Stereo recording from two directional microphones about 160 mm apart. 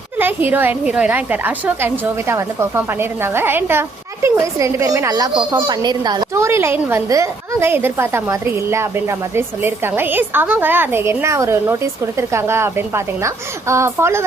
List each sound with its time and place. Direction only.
0.2 s a woman's voice: 10° right (ahead or behind)